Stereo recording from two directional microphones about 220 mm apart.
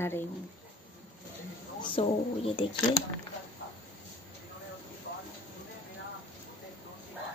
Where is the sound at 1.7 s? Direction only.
25° left (ahead or behind).